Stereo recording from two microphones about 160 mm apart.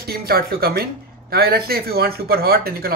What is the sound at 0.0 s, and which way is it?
Speech, 75° right (ahead or behind).